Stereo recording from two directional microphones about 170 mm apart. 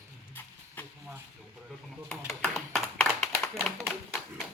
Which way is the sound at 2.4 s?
Centre (ahead or behind).